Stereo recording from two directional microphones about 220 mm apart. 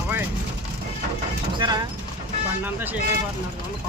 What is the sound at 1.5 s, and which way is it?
Clip-clop, 20° right (ahead or behind).